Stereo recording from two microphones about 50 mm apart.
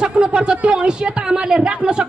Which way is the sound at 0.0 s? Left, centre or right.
Right.